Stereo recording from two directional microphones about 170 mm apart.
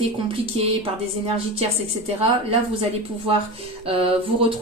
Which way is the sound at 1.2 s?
35° right (ahead or behind).